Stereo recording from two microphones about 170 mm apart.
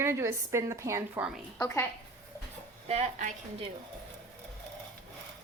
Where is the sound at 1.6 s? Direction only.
15° left (ahead or behind).